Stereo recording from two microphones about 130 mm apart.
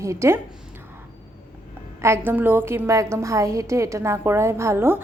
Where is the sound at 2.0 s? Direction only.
20° right (ahead or behind).